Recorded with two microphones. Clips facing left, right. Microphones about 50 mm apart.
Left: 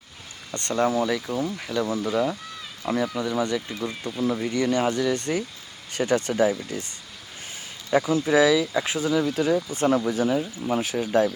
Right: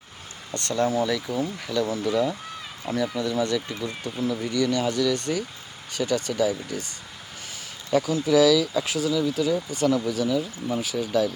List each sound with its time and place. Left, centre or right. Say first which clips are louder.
0.5 s speech: left 1 dB; left
1.5 s speech: even; centre
1.8 s speech: even; left
7.9 s speech: left 1 dB; left